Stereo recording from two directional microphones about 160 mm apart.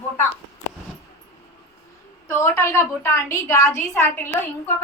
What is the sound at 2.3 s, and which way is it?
A woman's voice, 15° left (ahead or behind).